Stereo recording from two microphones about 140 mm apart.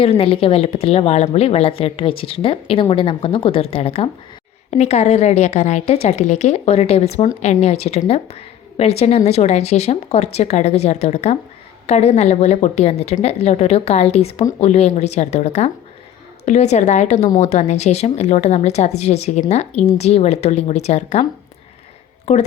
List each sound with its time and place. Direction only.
0.0 s a woman's voice: 40° left (ahead or behind)
22.3 s a woman's voice: 55° left (ahead or behind)